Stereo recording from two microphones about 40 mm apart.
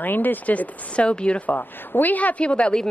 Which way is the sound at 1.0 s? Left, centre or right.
Left.